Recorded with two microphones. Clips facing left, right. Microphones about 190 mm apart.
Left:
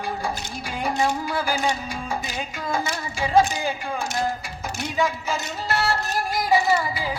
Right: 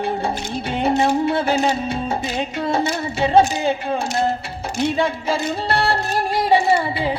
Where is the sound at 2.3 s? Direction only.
30° right (ahead or behind).